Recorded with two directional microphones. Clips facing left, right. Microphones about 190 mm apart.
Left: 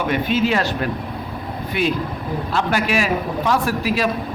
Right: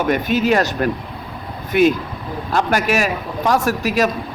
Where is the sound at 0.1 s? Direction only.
45° right (ahead or behind).